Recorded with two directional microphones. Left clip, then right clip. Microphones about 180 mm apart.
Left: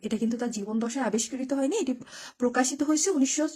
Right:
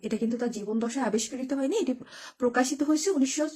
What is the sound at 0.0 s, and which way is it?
Speech, 25° left (ahead or behind).